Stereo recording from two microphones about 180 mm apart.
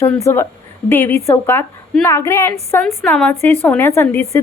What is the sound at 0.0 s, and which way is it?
A woman's voice, 15° left (ahead or behind).